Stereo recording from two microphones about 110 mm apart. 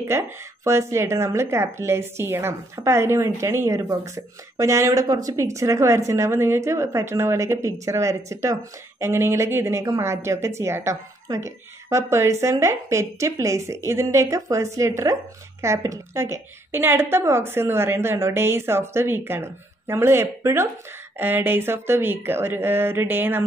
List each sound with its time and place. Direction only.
0.7 s a woman's voice: 25° right (ahead or behind)